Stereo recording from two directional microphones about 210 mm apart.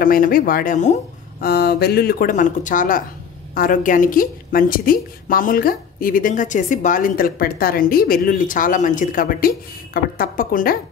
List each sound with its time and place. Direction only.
0.0 s a woman's voice: 40° left (ahead or behind)
1.4 s a woman's voice: 50° left (ahead or behind)